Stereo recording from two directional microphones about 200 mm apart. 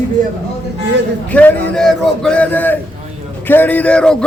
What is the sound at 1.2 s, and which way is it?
Speech, 10° left (ahead or behind).